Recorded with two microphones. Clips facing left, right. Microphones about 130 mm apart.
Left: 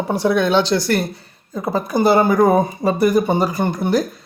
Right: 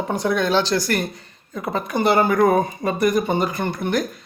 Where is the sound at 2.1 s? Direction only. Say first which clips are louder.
Left 2 dB; 10° left (ahead or behind).